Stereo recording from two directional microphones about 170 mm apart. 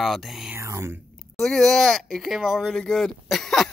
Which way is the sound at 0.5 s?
15° right (ahead or behind).